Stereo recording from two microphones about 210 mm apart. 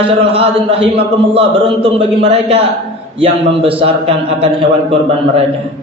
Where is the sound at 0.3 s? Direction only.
25° right (ahead or behind).